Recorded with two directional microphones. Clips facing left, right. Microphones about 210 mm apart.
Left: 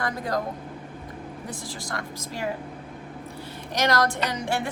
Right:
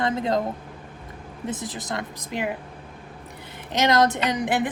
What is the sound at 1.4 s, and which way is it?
A woman's voice, 20° right (ahead or behind).